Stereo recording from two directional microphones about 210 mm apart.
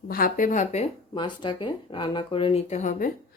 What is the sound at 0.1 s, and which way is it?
Speech, 40° left (ahead or behind).